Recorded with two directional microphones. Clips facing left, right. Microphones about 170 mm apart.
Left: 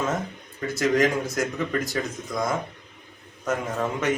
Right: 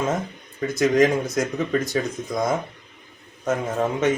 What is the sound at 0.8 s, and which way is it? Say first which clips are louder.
A man's voice: right 4 dB; 20° right (ahead or behind).